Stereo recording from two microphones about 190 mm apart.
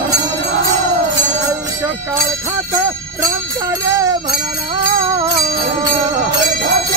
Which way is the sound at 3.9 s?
15° right (ahead or behind).